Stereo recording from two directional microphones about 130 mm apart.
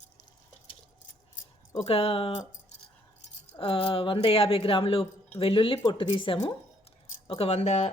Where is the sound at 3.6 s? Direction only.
45° left (ahead or behind).